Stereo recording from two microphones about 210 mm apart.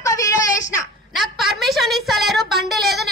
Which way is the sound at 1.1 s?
Centre (ahead or behind).